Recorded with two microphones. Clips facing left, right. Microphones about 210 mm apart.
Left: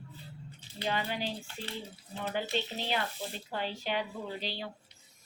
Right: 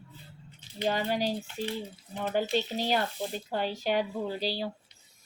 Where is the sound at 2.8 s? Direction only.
40° right (ahead or behind).